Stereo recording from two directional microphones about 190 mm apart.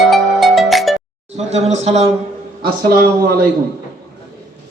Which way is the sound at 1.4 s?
35° right (ahead or behind).